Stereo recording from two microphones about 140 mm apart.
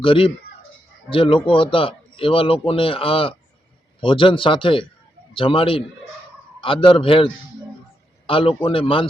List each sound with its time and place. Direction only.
0.0 s a man's voice: 40° left (ahead or behind)
8.3 s a man's voice: 40° left (ahead or behind)